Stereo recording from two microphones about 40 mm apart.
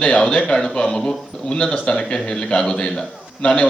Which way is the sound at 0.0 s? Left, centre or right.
Left.